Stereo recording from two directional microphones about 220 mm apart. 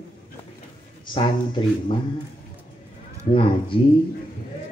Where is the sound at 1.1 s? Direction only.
20° left (ahead or behind).